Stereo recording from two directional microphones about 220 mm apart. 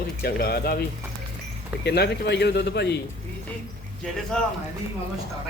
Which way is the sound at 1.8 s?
50° left (ahead or behind).